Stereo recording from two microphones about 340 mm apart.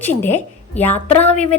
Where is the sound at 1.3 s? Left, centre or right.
Centre.